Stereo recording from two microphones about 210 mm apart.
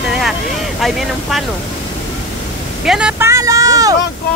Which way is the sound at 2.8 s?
5° right (ahead or behind).